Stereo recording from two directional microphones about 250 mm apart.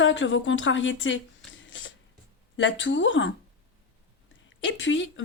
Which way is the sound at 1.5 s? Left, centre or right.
Left.